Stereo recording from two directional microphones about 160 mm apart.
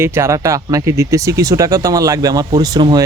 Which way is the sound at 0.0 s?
15° right (ahead or behind).